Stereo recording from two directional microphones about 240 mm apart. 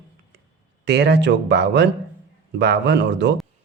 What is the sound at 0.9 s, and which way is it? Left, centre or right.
Speech, right.